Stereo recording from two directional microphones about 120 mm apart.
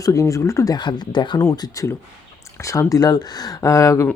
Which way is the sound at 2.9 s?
30° left (ahead or behind).